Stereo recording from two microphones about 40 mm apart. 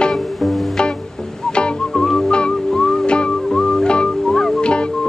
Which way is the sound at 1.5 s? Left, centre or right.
Left.